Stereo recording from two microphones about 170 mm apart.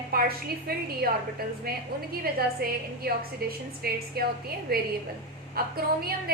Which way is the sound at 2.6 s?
60° right (ahead or behind).